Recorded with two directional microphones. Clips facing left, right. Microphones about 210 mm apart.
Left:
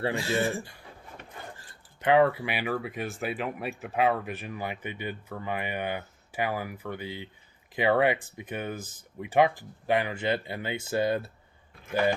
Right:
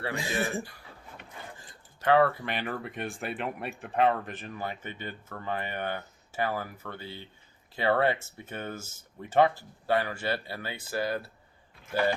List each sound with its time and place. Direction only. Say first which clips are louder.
2.0 s speech: left 1 dB; 15° left (ahead or behind)